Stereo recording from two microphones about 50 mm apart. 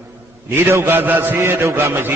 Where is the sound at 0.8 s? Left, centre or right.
Right.